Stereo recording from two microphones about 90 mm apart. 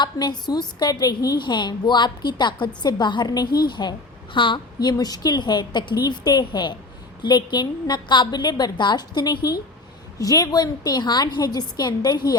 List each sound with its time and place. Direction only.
0.0 s a woman's voice: 50° left (ahead or behind)